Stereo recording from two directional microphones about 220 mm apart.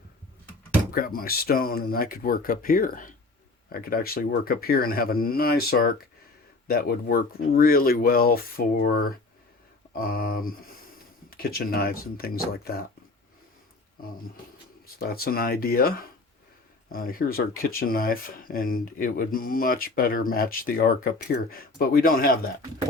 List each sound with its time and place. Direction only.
0.9 s speech: 40° left (ahead or behind)
14.0 s speech: 40° left (ahead or behind)